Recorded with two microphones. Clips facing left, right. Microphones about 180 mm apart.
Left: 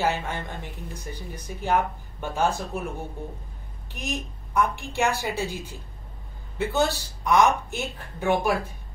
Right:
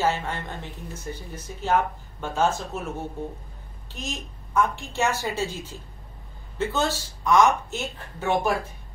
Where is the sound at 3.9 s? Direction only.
15° left (ahead or behind).